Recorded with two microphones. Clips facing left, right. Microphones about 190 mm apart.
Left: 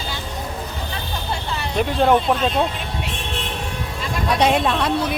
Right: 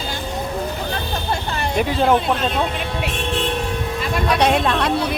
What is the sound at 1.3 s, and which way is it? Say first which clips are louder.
Music: right 3 dB; 50° right (ahead or behind).